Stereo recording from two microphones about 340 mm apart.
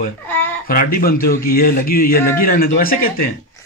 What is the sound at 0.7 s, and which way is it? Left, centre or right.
A man's voice, left.